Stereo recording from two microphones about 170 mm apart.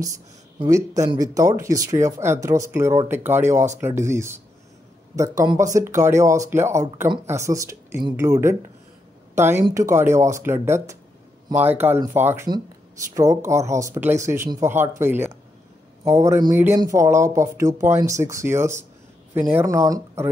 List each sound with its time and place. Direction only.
0.7 s speech: 20° right (ahead or behind)